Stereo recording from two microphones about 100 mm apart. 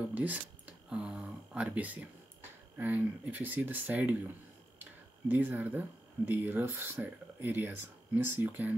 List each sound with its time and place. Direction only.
0.1 s a sound: 15° right (ahead or behind)
2.8 s speech: 20° right (ahead or behind)
5.3 s speech: 15° right (ahead or behind)